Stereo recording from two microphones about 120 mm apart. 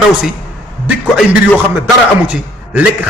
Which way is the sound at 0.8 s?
10° right (ahead or behind).